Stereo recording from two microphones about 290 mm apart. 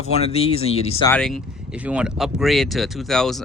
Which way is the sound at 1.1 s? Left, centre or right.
Centre.